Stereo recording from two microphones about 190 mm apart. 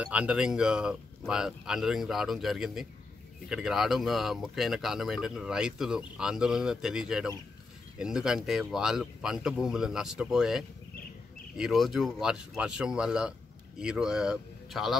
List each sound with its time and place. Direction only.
0.0 s speech: 5° right (ahead or behind)